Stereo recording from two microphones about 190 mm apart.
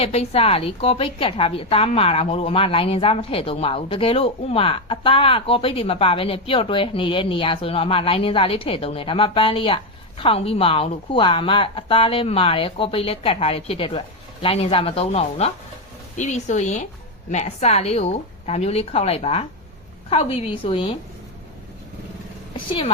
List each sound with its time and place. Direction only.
0.0 s a woman's voice: 30° left (ahead or behind)